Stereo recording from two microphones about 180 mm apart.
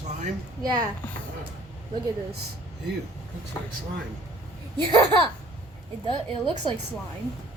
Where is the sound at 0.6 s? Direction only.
20° right (ahead or behind).